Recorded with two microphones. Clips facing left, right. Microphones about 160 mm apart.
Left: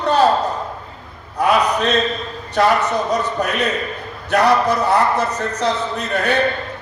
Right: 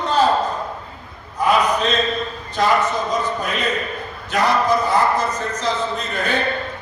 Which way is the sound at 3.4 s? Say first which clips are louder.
Left 3 dB; 70° left (ahead or behind).